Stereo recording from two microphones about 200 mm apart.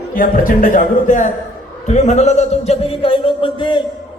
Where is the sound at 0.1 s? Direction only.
45° left (ahead or behind); by 3.8 s 25° left (ahead or behind).